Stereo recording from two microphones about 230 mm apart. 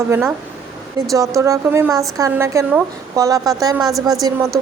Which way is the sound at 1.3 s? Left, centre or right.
Centre.